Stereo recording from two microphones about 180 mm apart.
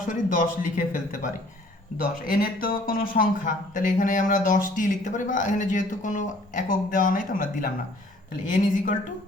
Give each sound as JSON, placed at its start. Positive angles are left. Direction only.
{"t": 0.3, "sound": "speech", "side_deg": 45}